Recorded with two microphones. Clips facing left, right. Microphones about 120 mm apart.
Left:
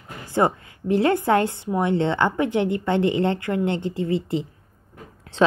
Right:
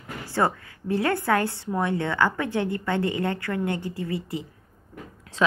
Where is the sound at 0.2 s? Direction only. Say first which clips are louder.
Left 4 dB; 20° left (ahead or behind).